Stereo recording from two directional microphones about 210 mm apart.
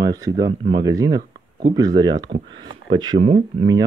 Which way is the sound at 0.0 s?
20° right (ahead or behind).